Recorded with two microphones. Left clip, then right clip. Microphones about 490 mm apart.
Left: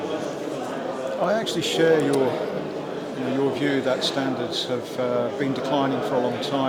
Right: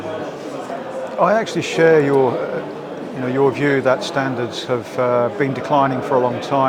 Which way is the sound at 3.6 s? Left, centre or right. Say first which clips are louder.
Right 7 dB; right.